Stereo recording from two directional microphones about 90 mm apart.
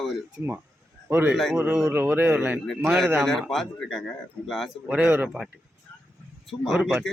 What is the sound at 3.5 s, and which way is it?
Speech, 5° left (ahead or behind).